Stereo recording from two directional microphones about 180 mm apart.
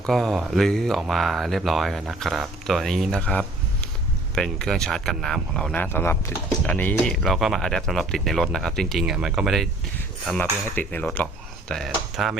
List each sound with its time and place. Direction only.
0.0 s speech: centre (ahead or behind)
10.8 s speech: 10° left (ahead or behind)